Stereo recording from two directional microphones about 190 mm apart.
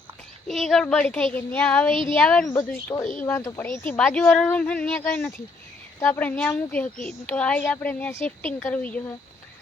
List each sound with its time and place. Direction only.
0.4 s speech: centre (ahead or behind)
2.6 s speech: 20° left (ahead or behind)